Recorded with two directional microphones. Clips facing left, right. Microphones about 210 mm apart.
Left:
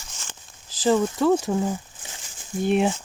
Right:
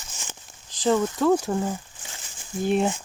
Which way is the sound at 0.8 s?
5° left (ahead or behind).